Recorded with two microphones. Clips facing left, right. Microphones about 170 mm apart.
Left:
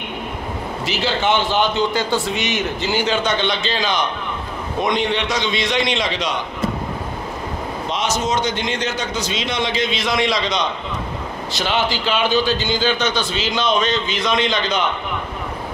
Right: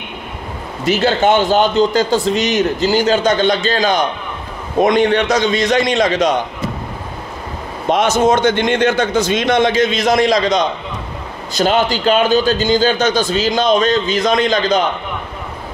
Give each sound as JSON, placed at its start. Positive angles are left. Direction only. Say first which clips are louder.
{"t": 0.8, "sound": "a man's voice", "louder": "right 7 dB", "side_deg": -50}
{"t": 7.9, "sound": "a man's voice", "louder": "right 9 dB", "side_deg": -55}